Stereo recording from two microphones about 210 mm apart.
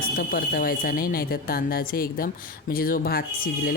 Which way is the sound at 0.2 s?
45° left (ahead or behind).